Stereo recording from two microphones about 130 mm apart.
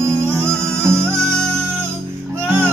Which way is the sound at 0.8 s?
20° right (ahead or behind).